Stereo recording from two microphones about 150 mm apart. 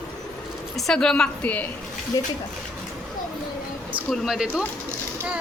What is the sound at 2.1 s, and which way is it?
Speech, 30° left (ahead or behind).